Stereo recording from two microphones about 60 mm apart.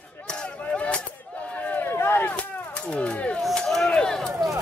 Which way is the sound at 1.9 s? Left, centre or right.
Left.